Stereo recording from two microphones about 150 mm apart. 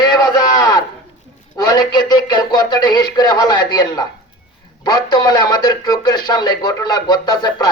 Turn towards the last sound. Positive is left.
turn(degrees=25)  # may be behind; listen again after turning